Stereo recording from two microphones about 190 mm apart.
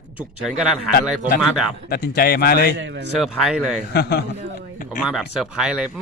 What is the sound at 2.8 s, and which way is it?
Speech, 65° right (ahead or behind).